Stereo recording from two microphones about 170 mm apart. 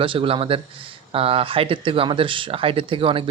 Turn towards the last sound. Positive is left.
turn(degrees=-30)  # may be behind; listen again after turning